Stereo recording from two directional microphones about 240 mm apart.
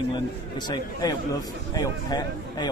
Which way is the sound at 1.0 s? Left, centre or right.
Centre.